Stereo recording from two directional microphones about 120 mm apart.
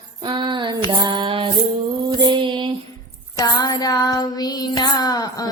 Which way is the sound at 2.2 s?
40° right (ahead or behind).